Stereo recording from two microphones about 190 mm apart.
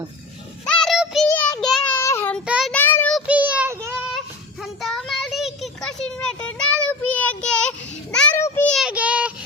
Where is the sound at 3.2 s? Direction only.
5° right (ahead or behind).